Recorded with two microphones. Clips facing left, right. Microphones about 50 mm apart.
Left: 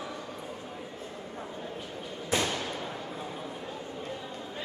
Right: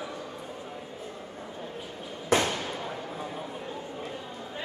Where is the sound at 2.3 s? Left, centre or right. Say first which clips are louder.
Right 5 dB; right.